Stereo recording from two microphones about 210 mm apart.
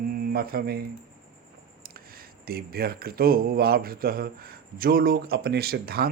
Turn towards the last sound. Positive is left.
turn(degrees=-45)  # may be behind; listen again after turning